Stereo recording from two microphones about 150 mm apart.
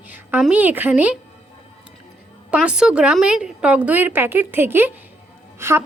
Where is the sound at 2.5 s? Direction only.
5° right (ahead or behind).